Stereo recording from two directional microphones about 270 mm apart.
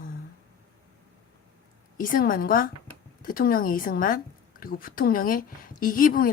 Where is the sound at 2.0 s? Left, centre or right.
Left.